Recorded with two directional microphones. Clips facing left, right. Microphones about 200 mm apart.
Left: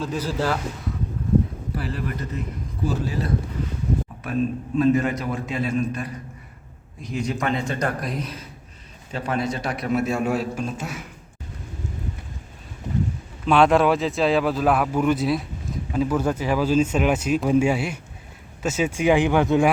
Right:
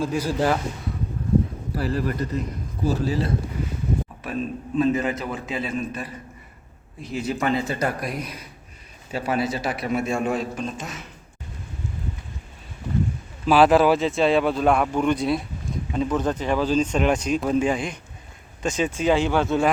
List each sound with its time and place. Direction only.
0.0 s speech: 10° right (ahead or behind)
1.7 s a man's voice: 40° right (ahead or behind)
4.8 s speech: centre (ahead or behind)
13.4 s speech: 5° right (ahead or behind); by 19.7 s 15° left (ahead or behind)